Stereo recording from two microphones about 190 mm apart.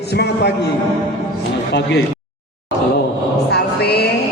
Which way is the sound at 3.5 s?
60° left (ahead or behind).